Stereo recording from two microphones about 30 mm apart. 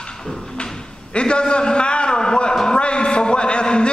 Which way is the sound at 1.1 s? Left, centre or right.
Left.